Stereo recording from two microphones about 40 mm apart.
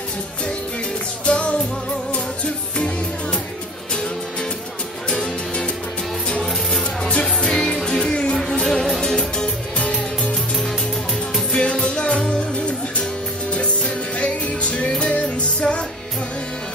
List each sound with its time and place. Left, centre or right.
1.2 s music: left
5.1 s music: left
6.4 s music: centre; by 8.4 s left
8.6 s music: centre
9.1 s music: left
11.5 s music: left
13.5 s music: left